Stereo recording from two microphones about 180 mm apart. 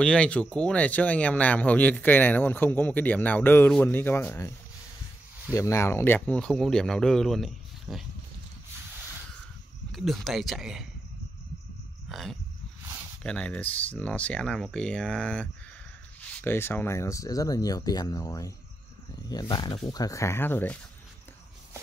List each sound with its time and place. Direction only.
0.0 s speech: 5° left (ahead or behind)
9.9 s speech: centre (ahead or behind)
12.1 s a sound: centre (ahead or behind)
13.2 s speech: 5° left (ahead or behind)